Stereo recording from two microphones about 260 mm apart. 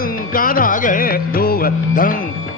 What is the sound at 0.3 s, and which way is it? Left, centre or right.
Music, left.